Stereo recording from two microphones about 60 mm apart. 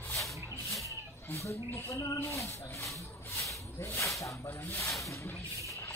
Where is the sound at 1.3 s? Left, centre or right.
Left.